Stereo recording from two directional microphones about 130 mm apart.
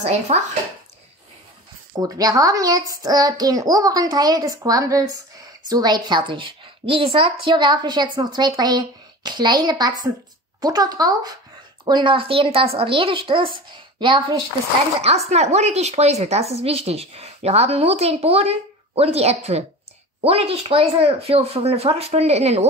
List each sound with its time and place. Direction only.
0.0 s a woman's voice: 55° right (ahead or behind)
2.0 s a woman's voice: 30° right (ahead or behind)
11.8 s a woman's voice: 40° right (ahead or behind)
15.0 s a woman's voice: 55° right (ahead or behind)